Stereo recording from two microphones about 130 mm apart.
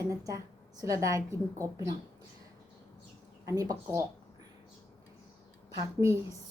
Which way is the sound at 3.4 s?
25° right (ahead or behind).